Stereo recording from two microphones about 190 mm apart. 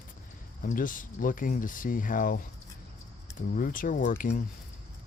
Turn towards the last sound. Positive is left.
turn(degrees=45)  # may be behind; listen again after turning